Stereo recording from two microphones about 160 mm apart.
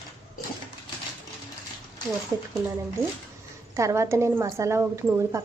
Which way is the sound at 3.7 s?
20° right (ahead or behind).